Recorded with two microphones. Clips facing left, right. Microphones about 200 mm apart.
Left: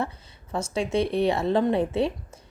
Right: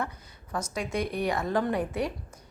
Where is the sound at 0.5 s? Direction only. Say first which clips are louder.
Left 6 dB; 25° left (ahead or behind).